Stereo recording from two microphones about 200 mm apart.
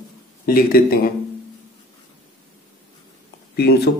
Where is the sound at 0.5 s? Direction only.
45° left (ahead or behind).